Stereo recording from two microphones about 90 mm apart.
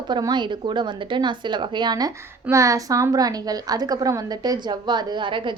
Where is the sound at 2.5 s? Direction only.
35° right (ahead or behind); by 5.5 s 65° right (ahead or behind).